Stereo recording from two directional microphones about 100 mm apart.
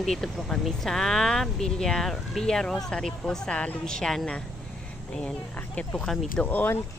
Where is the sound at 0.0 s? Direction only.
Centre (ahead or behind).